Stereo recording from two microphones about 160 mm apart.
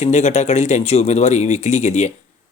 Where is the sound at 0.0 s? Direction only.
45° left (ahead or behind).